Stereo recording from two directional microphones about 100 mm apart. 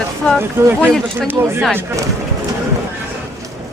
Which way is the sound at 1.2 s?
25° right (ahead or behind).